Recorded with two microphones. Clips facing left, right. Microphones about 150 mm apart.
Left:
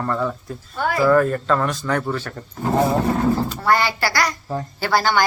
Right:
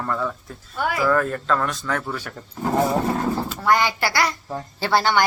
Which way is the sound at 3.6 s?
15° right (ahead or behind).